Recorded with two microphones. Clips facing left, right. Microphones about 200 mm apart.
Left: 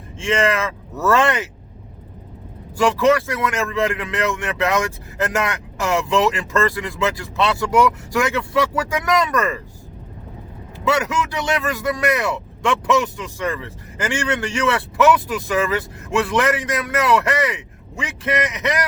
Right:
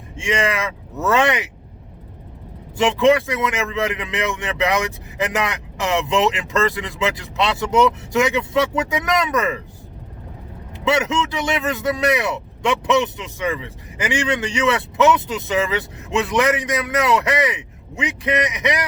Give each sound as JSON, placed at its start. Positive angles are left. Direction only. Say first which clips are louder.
{"t": 0.2, "sound": "speech", "louder": "left 2 dB", "side_deg": -15}
{"t": 2.7, "sound": "speech", "louder": "right 1 dB", "side_deg": -20}
{"t": 10.8, "sound": "speech", "louder": "right 1 dB", "side_deg": -20}